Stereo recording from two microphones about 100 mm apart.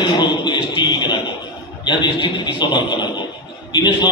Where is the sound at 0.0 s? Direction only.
50° left (ahead or behind).